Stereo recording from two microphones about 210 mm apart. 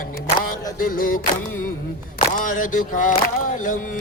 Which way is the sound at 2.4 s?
40° left (ahead or behind).